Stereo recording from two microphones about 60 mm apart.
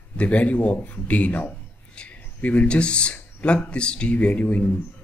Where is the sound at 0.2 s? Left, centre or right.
Left.